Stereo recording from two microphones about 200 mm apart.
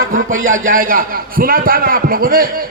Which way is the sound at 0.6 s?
45° right (ahead or behind).